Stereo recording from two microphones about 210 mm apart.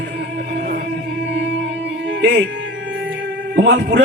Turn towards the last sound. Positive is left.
turn(degrees=-55)  # may be behind; listen again after turning